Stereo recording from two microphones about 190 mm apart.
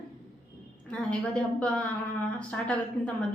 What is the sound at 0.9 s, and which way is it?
Speech, 5° left (ahead or behind).